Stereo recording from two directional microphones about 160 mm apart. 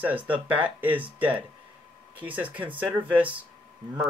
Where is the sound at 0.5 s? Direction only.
10° right (ahead or behind).